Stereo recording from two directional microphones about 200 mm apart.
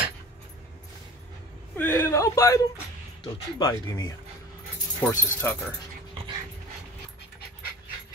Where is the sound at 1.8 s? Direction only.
15° left (ahead or behind).